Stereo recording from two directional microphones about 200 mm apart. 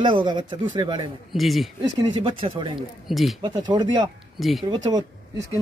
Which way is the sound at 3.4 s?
20° right (ahead or behind).